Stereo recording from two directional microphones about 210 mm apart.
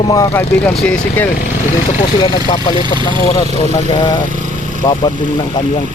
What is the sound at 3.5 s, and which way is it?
Speech, 30° left (ahead or behind).